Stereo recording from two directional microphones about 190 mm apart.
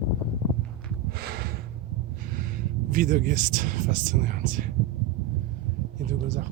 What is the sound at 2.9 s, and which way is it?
Speech, 45° right (ahead or behind).